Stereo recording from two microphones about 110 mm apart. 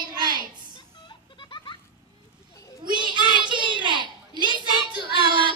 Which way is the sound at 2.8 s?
45° right (ahead or behind).